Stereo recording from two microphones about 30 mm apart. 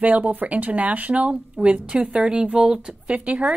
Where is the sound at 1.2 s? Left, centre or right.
Right.